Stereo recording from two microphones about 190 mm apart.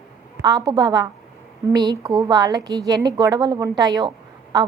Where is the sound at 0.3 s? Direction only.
20° right (ahead or behind).